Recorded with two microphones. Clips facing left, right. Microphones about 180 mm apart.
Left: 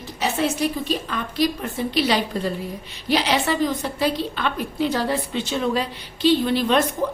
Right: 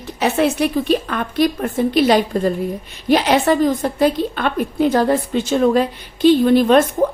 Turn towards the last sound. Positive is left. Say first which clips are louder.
# right 7 dB
turn(degrees=-50)  # may be behind; listen again after turning